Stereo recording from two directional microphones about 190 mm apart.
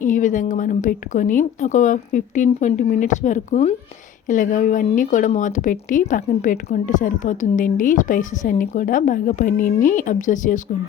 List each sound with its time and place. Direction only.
0.0 s a woman's voice: 40° left (ahead or behind)